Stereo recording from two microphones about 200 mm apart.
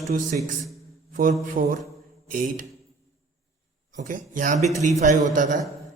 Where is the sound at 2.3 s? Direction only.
40° right (ahead or behind).